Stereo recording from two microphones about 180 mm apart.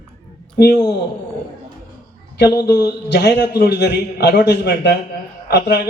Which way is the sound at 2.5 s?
65° left (ahead or behind).